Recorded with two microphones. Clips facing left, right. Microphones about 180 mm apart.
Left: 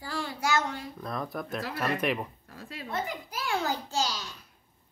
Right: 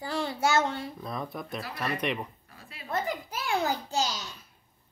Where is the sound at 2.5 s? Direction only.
90° left.